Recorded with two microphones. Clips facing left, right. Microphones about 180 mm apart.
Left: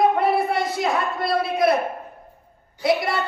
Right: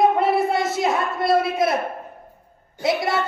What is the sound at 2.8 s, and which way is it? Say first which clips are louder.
Speech: even; 25° right (ahead or behind).